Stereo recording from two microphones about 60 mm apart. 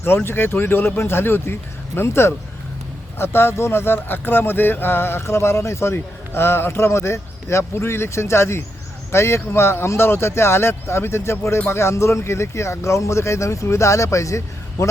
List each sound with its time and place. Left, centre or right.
0.3 s speech: left